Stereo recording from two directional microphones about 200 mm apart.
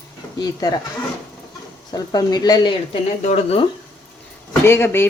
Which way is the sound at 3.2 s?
35° left (ahead or behind).